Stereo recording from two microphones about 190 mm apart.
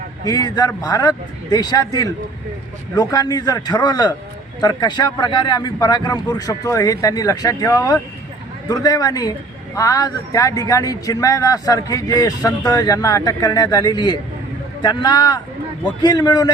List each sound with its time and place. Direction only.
0.3 s speech: 20° left (ahead or behind)